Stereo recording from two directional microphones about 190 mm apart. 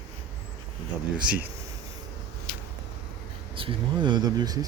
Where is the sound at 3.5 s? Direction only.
25° right (ahead or behind).